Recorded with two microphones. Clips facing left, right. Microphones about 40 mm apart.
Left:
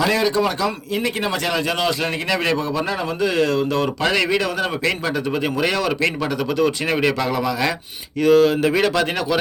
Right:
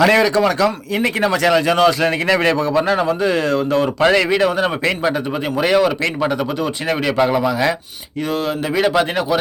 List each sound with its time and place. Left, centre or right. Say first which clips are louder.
0.0 s speech: right 5 dB; right
2.2 s speech: right 4 dB; right
2.7 s speech: right 7 dB; right
3.1 s speech: right 2 dB; right
4.1 s a man's voice: right 4 dB; centre
4.4 s speech: right 5 dB; right
5.5 s a man's voice: right 9 dB; centre
6.8 s a man's voice: even; centre
7.3 s a man's voice: right 4 dB; centre